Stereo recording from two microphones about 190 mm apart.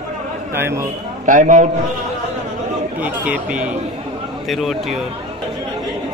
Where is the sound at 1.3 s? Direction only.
40° right (ahead or behind).